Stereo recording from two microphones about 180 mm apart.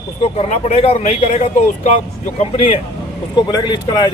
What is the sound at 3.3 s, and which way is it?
Speech, 25° left (ahead or behind).